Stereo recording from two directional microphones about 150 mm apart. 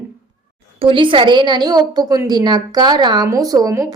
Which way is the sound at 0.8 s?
35° right (ahead or behind).